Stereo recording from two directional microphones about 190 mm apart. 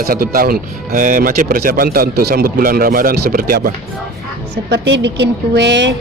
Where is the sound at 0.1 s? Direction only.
50° right (ahead or behind).